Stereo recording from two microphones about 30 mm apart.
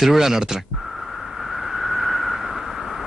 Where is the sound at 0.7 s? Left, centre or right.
Centre.